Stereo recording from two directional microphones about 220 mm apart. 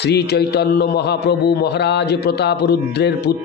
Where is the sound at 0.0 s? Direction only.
50° left (ahead or behind).